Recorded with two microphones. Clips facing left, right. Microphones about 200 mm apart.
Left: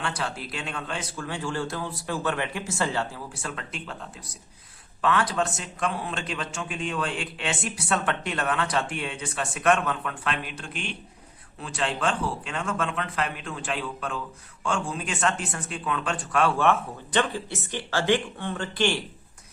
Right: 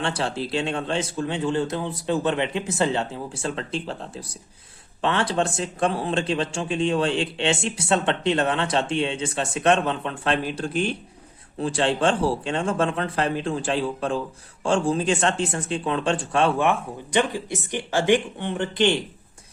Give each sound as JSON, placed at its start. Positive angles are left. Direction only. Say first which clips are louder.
{"t": 0.0, "sound": "a man's voice", "louder": "right 6 dB", "side_deg": -30}